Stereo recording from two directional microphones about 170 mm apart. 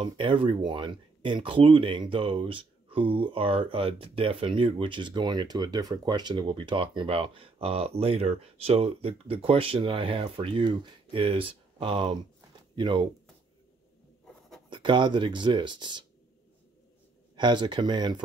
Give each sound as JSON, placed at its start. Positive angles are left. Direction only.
{"t": 0.0, "sound": "speech", "side_deg": -30}
{"t": 14.7, "sound": "speech", "side_deg": -30}
{"t": 17.4, "sound": "speech", "side_deg": -25}